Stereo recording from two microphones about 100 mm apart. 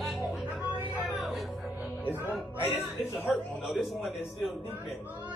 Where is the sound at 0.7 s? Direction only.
15° right (ahead or behind).